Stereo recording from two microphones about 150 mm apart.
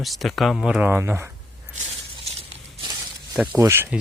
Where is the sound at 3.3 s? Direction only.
10° right (ahead or behind).